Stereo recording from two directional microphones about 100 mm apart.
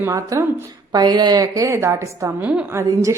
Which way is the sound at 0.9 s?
45° right (ahead or behind).